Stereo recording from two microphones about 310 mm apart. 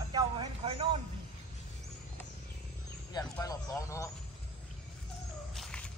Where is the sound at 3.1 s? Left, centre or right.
Centre.